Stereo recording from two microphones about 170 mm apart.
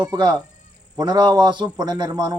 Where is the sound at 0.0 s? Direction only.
25° right (ahead or behind).